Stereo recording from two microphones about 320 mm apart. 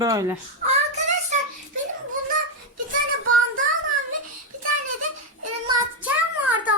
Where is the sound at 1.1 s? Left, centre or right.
Right.